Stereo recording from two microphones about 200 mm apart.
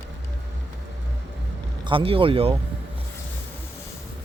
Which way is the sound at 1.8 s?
25° right (ahead or behind).